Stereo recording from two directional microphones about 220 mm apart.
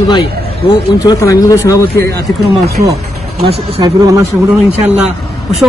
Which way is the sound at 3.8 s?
15° right (ahead or behind).